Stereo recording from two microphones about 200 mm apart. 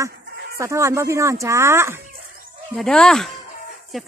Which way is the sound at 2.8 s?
5° left (ahead or behind).